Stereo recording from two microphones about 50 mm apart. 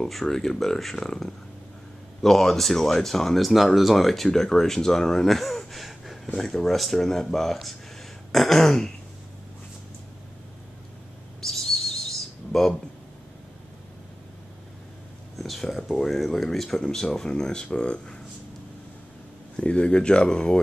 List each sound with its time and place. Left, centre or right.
0.0 s speech: centre
8.3 s throat clearing: centre
11.4 s bird: centre
15.3 s speech: centre
19.5 s speech: left